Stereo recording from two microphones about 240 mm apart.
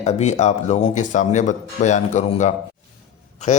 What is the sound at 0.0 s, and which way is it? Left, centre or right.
A man's voice, left.